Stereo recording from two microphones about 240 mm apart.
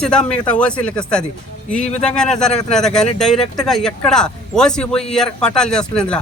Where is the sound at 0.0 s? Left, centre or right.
Centre.